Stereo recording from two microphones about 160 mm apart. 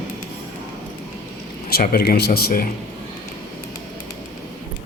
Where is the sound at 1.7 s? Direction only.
70° left (ahead or behind).